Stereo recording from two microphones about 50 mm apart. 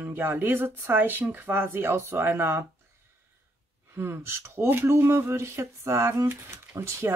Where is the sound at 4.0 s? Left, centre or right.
Right.